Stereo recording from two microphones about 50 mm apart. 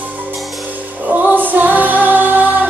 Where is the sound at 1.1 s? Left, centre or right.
Right.